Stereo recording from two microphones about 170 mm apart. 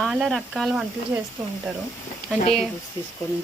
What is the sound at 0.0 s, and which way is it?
Speech, centre (ahead or behind).